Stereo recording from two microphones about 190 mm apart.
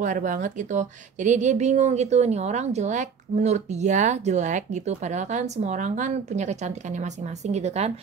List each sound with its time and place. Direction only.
0.0 s a woman's voice: 40° right (ahead or behind)